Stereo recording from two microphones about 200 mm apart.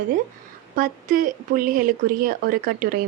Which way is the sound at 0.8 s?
45° right (ahead or behind).